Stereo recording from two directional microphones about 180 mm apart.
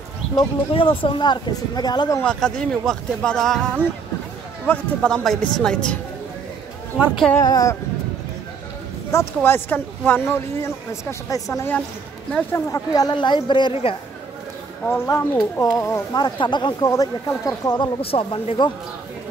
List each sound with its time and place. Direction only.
0.4 s speech: 30° left (ahead or behind)
2.2 s speech: 5° left (ahead or behind)
4.6 s speech: 5° left (ahead or behind)
7.0 s speech: 10° right (ahead or behind)
7.4 s speech: 20° left (ahead or behind)
9.1 s speech: 15° left (ahead or behind)
12.3 s speech: 5° left (ahead or behind)
12.7 s speech: 20° left (ahead or behind)